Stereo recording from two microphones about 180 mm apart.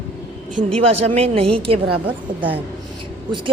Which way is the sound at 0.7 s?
35° right (ahead or behind).